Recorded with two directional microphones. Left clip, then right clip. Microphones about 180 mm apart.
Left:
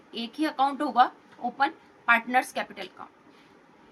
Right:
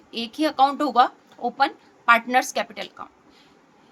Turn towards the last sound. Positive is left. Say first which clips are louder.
# right 6 dB
turn(degrees=-60)  # may be behind; listen again after turning